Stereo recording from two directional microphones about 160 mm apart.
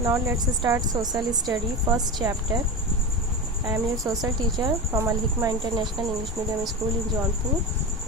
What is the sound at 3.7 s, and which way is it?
A woman's voice, 20° right (ahead or behind).